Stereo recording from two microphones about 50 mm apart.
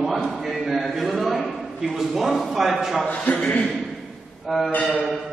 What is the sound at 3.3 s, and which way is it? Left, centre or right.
Speech, left.